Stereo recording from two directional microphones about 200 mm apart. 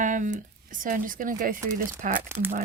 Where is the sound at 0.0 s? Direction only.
40° right (ahead or behind).